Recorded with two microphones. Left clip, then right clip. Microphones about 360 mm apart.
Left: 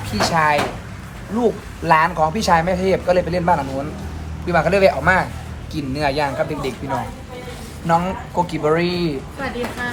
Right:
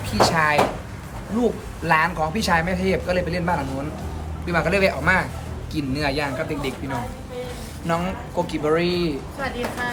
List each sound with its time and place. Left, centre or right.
0.1 s speech: centre